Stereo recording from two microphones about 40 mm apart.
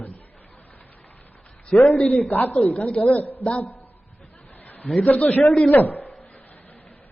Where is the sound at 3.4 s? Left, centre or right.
Left.